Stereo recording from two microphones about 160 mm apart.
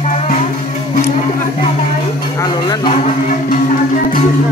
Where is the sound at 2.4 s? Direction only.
25° left (ahead or behind).